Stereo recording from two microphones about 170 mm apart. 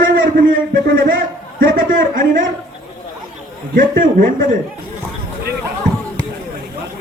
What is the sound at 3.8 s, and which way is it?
Speech, 55° right (ahead or behind).